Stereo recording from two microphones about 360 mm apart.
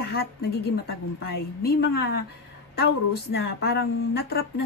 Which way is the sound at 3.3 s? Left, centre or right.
Left.